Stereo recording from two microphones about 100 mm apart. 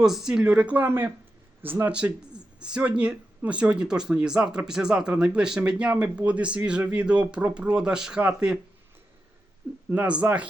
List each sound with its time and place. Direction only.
0.0 s speech: 5° right (ahead or behind)
9.9 s speech: 15° right (ahead or behind)